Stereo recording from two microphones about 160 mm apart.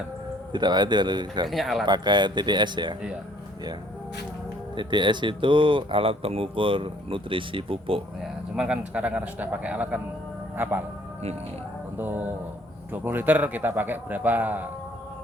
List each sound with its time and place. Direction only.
0.5 s speech: 25° right (ahead or behind)
1.5 s speech: centre (ahead or behind)
1.8 s speech: 25° right (ahead or behind)
4.7 s speech: 30° right (ahead or behind)
8.2 s a man's voice: 5° right (ahead or behind)
11.9 s a man's voice: 10° right (ahead or behind)